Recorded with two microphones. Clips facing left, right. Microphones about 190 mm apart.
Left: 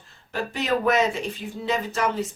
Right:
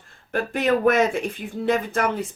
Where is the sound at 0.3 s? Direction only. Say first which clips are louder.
Right 4 dB; 55° right (ahead or behind).